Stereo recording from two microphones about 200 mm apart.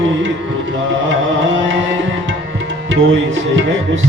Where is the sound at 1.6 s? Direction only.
70° right (ahead or behind).